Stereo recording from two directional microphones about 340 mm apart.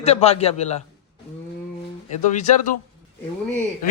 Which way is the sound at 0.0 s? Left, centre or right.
Centre.